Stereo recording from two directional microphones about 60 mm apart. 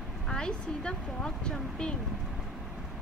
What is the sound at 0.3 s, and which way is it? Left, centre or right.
Speech, centre.